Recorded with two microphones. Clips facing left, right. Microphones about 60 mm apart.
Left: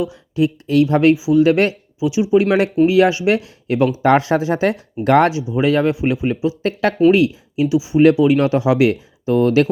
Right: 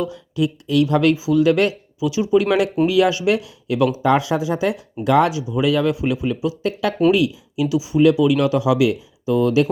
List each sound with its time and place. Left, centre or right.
0.0 s speech: left
4.0 s speech: left
5.4 s speech: left
6.6 s speech: left